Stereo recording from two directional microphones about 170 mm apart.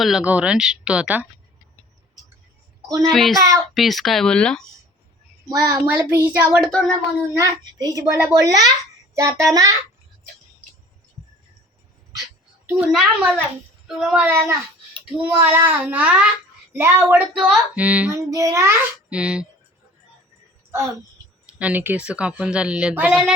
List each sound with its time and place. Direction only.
0.0 s speech: 5° right (ahead or behind)
3.1 s speech: centre (ahead or behind)
3.3 s a child's voice: 20° right (ahead or behind)
3.8 s speech: centre (ahead or behind)
5.5 s a child's voice: 20° right (ahead or behind)
6.0 s a woman's voice: 10° right (ahead or behind)
6.7 s speech: 5° left (ahead or behind)
7.3 s a child's voice: 20° right (ahead or behind)
12.6 s a woman's voice: 5° right (ahead or behind)
20.7 s a sound: 15° right (ahead or behind)
21.6 s a woman's voice: 10° right (ahead or behind)